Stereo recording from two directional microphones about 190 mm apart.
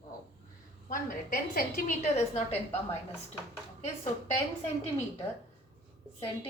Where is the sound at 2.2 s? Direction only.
35° left (ahead or behind).